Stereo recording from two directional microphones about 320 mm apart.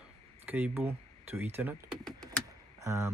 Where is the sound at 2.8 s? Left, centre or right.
Centre.